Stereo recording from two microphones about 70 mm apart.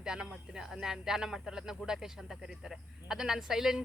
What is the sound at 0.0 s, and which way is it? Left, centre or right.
Speech, centre.